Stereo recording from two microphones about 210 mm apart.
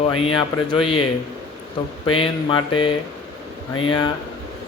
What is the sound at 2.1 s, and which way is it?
Speech, 25° left (ahead or behind).